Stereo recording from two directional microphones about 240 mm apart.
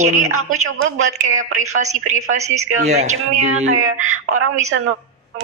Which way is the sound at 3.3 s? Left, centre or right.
Right.